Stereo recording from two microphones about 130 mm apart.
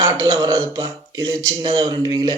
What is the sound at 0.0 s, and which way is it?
Speech, 30° right (ahead or behind).